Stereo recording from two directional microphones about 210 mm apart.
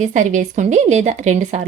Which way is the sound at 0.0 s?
35° right (ahead or behind).